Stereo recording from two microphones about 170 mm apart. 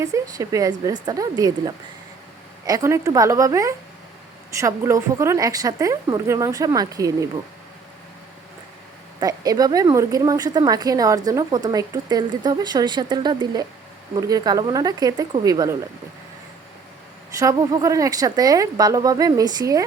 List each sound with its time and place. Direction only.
0.0 s a woman's voice: 20° right (ahead or behind)
9.2 s a woman's voice: 20° right (ahead or behind)
17.4 s a woman's voice: 20° right (ahead or behind)